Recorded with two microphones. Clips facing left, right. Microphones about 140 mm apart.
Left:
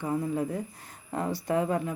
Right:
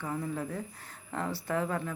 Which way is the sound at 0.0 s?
15° left (ahead or behind).